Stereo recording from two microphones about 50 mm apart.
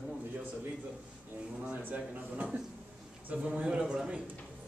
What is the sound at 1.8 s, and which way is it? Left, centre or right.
Speech, right.